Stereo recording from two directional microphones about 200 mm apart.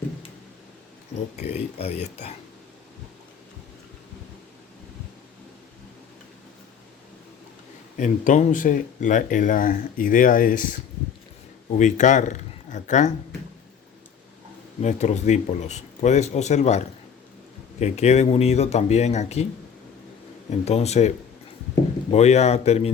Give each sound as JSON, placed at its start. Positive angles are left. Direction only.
{"t": 1.4, "sound": "speech", "side_deg": 30}
{"t": 7.9, "sound": "speech", "side_deg": 40}
{"t": 11.8, "sound": "speech", "side_deg": 35}
{"t": 14.8, "sound": "speech", "side_deg": 35}
{"t": 20.5, "sound": "speech", "side_deg": 30}
{"t": 22.1, "sound": "speech", "side_deg": 30}